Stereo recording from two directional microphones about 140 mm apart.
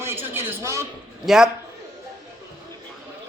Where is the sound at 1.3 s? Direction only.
5° right (ahead or behind).